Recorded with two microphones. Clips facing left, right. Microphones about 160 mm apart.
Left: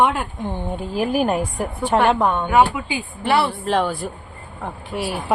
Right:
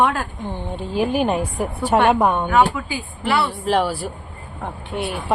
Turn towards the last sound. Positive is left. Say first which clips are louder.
# even
turn(degrees=0)  # may be behind; listen again after turning